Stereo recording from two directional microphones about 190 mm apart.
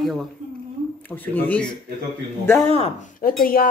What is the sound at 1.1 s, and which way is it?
Speech, 10° left (ahead or behind).